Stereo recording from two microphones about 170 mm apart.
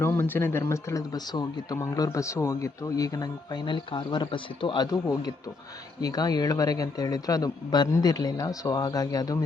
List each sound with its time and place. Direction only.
0.0 s speech: 10° left (ahead or behind)